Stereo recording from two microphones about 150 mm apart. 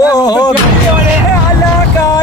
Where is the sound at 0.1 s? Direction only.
25° left (ahead or behind).